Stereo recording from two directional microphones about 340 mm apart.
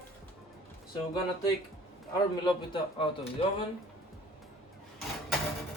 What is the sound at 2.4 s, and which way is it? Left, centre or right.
Speech, centre.